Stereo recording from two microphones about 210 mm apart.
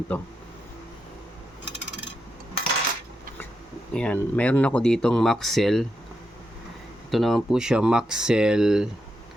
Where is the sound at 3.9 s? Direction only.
5° left (ahead or behind).